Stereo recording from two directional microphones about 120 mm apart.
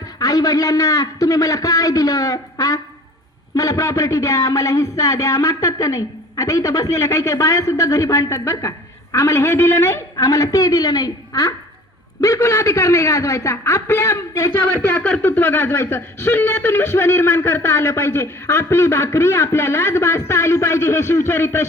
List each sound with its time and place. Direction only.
0.2 s speech: 30° left (ahead or behind)
14.8 s speech: 15° left (ahead or behind)